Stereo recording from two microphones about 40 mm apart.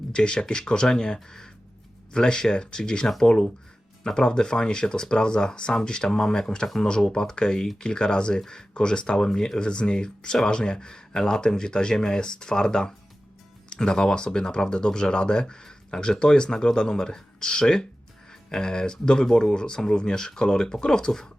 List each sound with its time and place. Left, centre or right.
0.1 s speech: left